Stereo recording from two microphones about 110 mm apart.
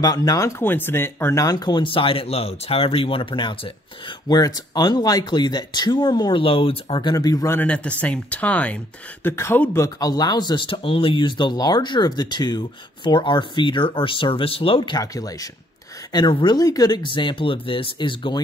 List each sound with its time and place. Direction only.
0.0 s speech: 35° left (ahead or behind)
1.4 s speech: 35° left (ahead or behind)
4.3 s speech: 40° left (ahead or behind)
6.4 s speech: 60° left (ahead or behind); by 7.5 s 35° left (ahead or behind)
7.5 s speech: 10° left (ahead or behind)
9.2 s speech: 25° left (ahead or behind)
9.8 s speech: 35° left (ahead or behind); by 15.0 s 55° left (ahead or behind)
15.0 s speech: 35° left (ahead or behind)